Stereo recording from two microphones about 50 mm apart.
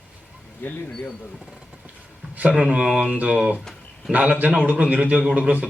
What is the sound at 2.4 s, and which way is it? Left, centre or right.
Speech, right.